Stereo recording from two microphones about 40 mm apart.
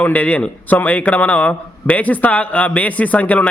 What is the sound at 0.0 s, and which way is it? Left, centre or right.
A man's voice, left.